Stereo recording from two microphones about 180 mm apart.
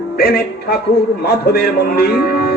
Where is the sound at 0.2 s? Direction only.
60° left (ahead or behind).